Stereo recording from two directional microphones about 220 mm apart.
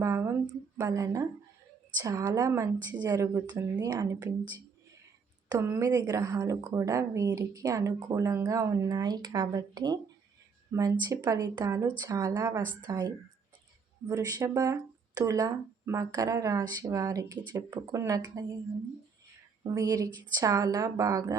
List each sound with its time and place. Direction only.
0.0 s a woman's voice: 10° right (ahead or behind)
5.5 s a woman's voice: 10° right (ahead or behind)
19.7 s a woman's voice: 15° right (ahead or behind)